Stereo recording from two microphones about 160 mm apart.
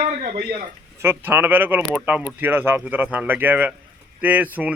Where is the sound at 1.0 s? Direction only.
15° right (ahead or behind).